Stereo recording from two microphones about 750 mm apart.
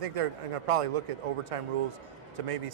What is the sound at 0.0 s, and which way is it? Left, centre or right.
Speech, right.